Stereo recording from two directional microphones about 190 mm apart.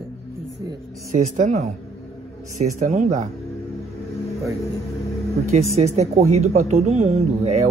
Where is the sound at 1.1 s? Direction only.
40° right (ahead or behind).